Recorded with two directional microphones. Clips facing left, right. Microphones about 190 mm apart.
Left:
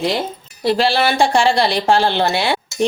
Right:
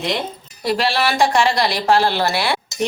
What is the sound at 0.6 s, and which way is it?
Speech, 30° left (ahead or behind).